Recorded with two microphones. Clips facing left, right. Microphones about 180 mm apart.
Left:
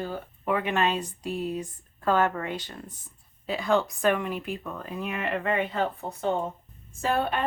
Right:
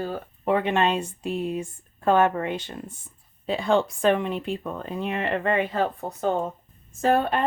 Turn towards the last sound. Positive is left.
turn(degrees=-45)  # may be behind; listen again after turning